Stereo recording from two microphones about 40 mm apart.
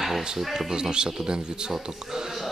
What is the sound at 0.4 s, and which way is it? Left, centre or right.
Speech, centre.